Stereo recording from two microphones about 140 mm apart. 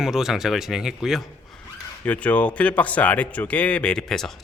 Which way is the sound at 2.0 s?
10° left (ahead or behind).